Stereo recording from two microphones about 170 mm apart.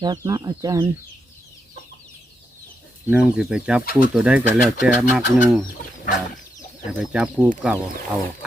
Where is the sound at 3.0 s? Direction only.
5° right (ahead or behind).